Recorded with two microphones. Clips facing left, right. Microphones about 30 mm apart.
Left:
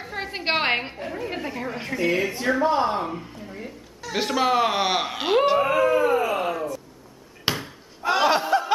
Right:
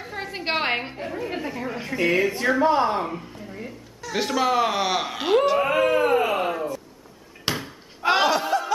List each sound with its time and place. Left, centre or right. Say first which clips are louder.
0.1 s a woman's voice: left 2 dB; centre
1.0 s speech: right 1 dB; centre
2.1 s speech: right 2 dB; centre
5.9 s speech: even; right
6.3 s a sound: right 1 dB; centre
7.5 s a sound: left 1 dB; centre
8.0 s snicker: right 3 dB; right
8.5 s music: left 2 dB; left